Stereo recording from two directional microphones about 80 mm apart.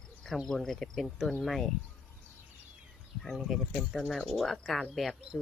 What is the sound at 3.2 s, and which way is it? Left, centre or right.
Speech, centre.